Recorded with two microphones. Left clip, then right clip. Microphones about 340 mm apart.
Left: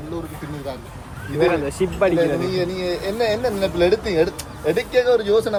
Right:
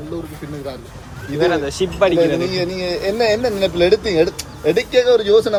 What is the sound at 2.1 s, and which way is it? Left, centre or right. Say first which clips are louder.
Speech: right 3 dB; right.